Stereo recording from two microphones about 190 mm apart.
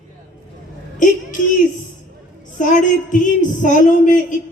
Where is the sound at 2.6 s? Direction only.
40° left (ahead or behind).